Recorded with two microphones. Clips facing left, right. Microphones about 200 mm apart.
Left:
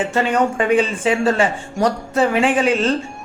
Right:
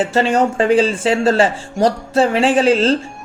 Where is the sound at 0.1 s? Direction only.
30° right (ahead or behind).